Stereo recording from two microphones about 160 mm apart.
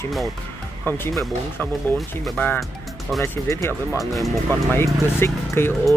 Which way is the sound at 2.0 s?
Centre (ahead or behind).